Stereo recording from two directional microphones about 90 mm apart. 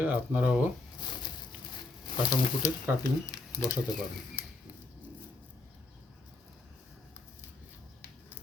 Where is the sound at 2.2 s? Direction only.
50° left (ahead or behind).